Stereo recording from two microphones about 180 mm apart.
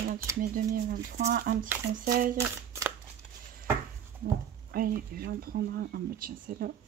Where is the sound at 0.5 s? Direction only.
50° right (ahead or behind).